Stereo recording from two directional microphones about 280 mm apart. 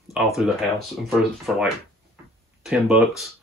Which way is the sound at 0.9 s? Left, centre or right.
Centre.